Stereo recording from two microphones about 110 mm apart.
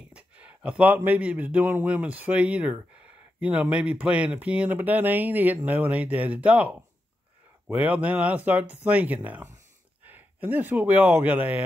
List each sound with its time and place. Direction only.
0.1 s a man's voice: 10° right (ahead or behind)